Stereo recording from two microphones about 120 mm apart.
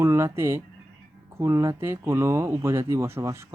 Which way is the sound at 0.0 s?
20° right (ahead or behind).